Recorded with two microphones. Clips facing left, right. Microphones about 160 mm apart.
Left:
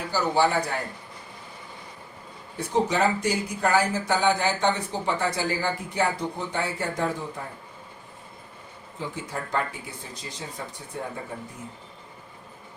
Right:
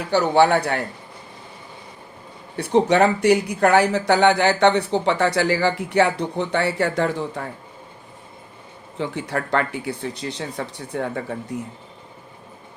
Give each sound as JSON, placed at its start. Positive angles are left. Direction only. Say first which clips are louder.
{"t": 0.1, "sound": "speech", "louder": "right 7 dB", "side_deg": -70}
{"t": 2.6, "sound": "speech", "louder": "right 7 dB", "side_deg": -70}
{"t": 9.0, "sound": "speech", "louder": "right 7 dB", "side_deg": -70}